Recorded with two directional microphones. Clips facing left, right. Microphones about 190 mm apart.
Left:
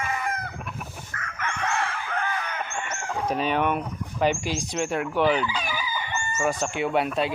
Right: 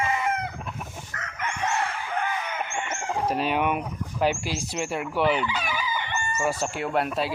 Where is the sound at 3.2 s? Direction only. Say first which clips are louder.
Left 1 dB; 5° right (ahead or behind).